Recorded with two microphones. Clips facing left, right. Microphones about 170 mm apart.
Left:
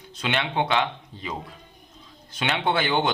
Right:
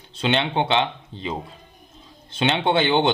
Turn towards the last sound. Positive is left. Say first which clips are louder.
# right 4 dB
turn(degrees=-25)  # may be behind; listen again after turning